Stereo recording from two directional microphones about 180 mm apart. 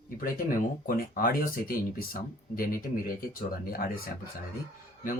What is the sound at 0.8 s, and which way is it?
Speech, 50° left (ahead or behind).